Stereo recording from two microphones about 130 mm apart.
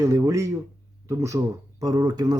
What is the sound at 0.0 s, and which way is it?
Speech, 25° right (ahead or behind).